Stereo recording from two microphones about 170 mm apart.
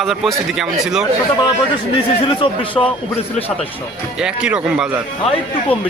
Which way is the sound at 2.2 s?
30° left (ahead or behind).